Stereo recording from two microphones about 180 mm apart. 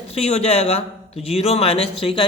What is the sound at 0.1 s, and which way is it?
A man's voice, 35° left (ahead or behind).